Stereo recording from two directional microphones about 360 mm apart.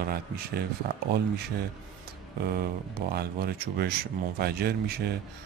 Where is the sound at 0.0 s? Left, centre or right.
Right.